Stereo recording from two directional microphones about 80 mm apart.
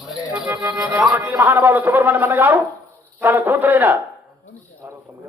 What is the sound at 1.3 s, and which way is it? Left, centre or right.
Speech, right.